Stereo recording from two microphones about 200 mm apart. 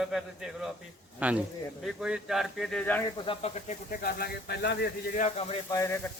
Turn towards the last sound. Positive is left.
turn(degrees=15)  # may be behind; listen again after turning